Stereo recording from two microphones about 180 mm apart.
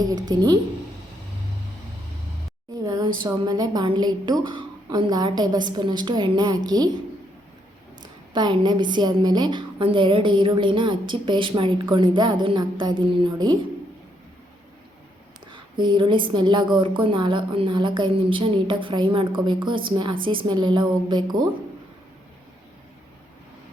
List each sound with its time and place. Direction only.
0.0 s a woman's voice: 20° right (ahead or behind)
2.8 s a woman's voice: 25° right (ahead or behind)
8.0 s a woman's voice: 25° right (ahead or behind)
15.5 s a woman's voice: 25° right (ahead or behind)